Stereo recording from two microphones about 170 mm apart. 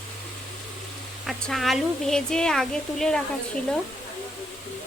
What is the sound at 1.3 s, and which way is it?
Speech, centre (ahead or behind).